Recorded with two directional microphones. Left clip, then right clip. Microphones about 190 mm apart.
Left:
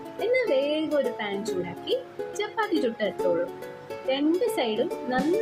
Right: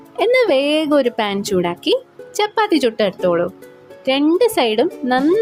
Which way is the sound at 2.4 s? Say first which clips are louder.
Right 11 dB; 50° right (ahead or behind).